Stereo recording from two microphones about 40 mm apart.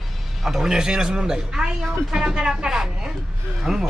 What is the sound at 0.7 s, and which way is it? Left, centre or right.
A woman's voice, centre.